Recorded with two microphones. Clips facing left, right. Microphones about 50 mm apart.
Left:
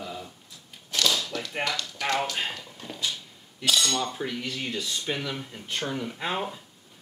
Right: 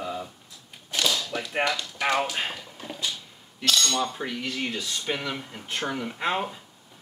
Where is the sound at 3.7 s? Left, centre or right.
Centre.